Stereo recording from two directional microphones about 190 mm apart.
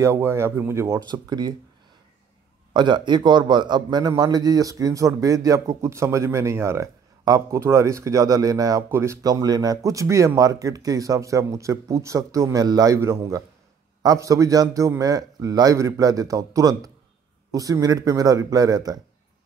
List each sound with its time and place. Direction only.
0.0 s a man's voice: 15° right (ahead or behind)
2.7 s a man's voice: 25° right (ahead or behind)